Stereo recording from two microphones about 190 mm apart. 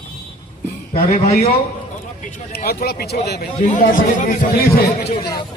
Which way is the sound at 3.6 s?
40° left (ahead or behind).